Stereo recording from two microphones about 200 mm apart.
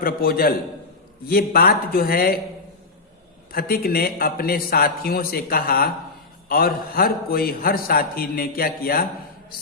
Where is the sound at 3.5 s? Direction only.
50° left (ahead or behind).